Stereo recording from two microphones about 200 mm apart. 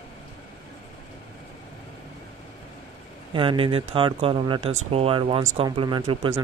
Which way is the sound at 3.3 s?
25° right (ahead or behind).